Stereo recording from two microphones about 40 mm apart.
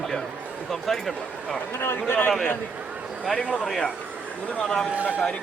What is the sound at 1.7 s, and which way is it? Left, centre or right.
Speech, left.